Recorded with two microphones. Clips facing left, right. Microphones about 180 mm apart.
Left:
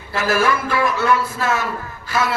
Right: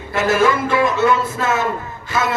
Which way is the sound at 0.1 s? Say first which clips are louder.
Right 3 dB; 20° right (ahead or behind).